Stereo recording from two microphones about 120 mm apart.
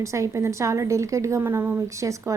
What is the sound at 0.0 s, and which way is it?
A woman's voice, 25° right (ahead or behind).